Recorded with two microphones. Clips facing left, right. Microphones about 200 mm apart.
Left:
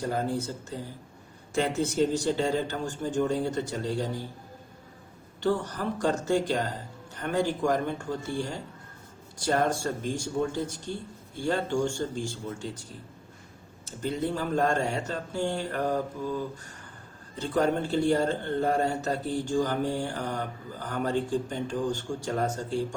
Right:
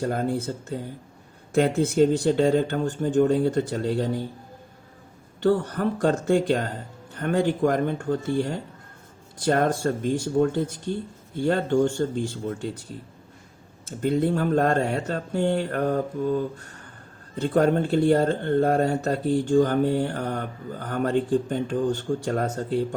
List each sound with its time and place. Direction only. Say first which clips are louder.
0.0 s speech: right 4 dB; 60° right (ahead or behind)
5.4 s speech: right 6 dB; 55° right (ahead or behind)
13.8 s speech: right 7 dB; 55° right (ahead or behind)